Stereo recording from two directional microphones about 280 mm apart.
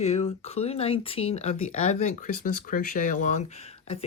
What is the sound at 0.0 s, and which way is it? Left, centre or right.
Speech, left.